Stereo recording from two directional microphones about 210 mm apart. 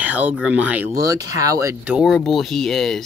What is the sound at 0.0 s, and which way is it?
Speech, 5° right (ahead or behind).